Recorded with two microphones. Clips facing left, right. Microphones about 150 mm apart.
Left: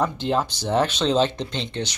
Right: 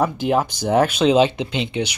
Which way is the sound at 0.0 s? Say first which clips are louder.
Right 4 dB; 10° right (ahead or behind).